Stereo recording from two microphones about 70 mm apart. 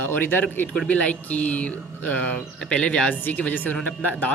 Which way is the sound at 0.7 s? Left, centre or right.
Centre.